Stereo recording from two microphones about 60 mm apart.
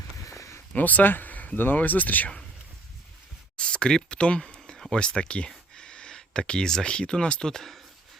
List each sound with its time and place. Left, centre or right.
0.3 s a sound: left
0.7 s speech: left
3.6 s speech: centre